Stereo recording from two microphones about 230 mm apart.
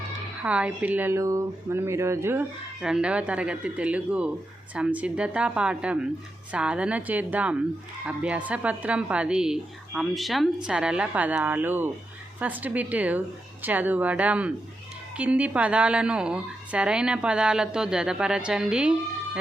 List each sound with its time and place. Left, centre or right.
0.4 s a woman's voice: centre